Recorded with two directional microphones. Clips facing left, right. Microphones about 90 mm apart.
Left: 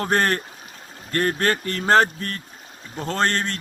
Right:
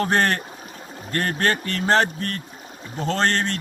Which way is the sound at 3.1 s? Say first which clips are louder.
Right 1 dB; 40° left (ahead or behind).